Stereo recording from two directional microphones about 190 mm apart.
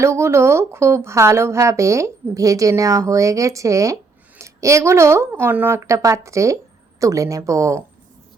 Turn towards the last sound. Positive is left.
turn(degrees=-15)  # may be behind; listen again after turning